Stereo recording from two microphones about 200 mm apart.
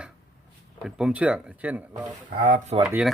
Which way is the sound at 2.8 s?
5° right (ahead or behind).